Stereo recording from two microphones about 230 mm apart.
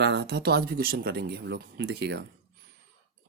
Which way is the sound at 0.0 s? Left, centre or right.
Right.